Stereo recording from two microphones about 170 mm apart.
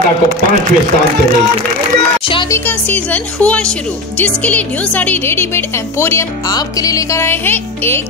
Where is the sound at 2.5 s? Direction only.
10° left (ahead or behind).